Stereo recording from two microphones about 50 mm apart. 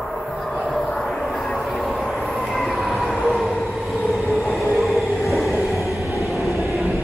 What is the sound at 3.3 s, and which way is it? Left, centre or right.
Train, centre.